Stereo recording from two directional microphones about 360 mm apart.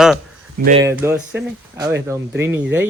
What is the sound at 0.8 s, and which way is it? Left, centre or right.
Speech, centre.